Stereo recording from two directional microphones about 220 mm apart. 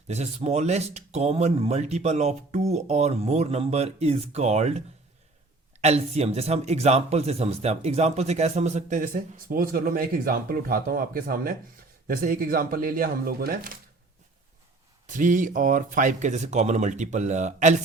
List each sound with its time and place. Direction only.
0.1 s speech: 30° right (ahead or behind)
5.8 s speech: 30° right (ahead or behind)
15.0 s speech: 35° right (ahead or behind)